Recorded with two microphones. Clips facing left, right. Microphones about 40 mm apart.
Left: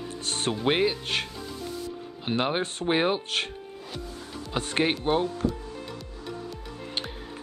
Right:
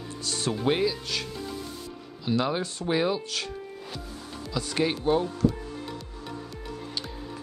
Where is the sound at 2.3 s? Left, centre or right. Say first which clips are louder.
Even; left.